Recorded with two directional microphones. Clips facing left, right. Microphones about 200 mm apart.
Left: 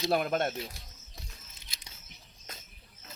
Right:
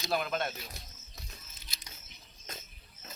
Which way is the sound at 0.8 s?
20° right (ahead or behind).